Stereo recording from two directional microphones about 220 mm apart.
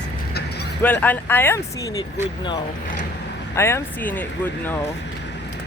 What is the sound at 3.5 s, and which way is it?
Speech, 10° left (ahead or behind).